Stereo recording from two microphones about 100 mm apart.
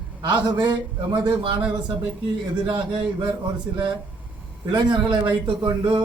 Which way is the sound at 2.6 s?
55° right (ahead or behind).